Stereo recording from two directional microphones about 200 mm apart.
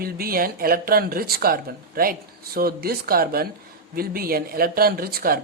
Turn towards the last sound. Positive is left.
turn(degrees=-50)  # may be behind; listen again after turning